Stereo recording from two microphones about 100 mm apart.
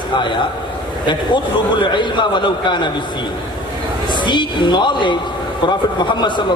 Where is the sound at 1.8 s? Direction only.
50° left (ahead or behind).